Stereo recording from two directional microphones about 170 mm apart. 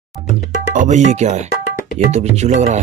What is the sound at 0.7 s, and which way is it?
Speech, 45° right (ahead or behind).